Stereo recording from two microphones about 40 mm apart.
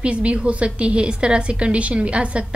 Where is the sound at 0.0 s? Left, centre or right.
Right.